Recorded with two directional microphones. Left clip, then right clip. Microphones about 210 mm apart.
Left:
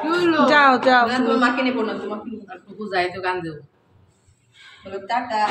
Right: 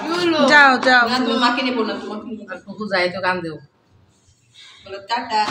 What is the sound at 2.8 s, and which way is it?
Speech, 20° right (ahead or behind).